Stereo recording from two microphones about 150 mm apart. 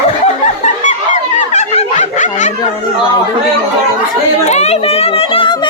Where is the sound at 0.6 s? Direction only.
55° left (ahead or behind).